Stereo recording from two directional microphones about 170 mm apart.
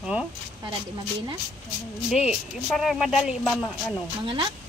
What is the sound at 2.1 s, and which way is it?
Speech, 5° right (ahead or behind).